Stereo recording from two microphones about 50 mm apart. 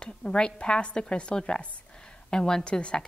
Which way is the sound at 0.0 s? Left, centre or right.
Centre.